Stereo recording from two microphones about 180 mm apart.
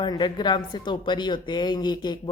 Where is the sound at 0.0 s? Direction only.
25° left (ahead or behind).